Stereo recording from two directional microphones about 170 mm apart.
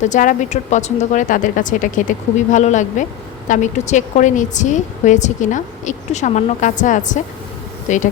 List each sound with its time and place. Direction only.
0.0 s a woman's voice: 45° left (ahead or behind)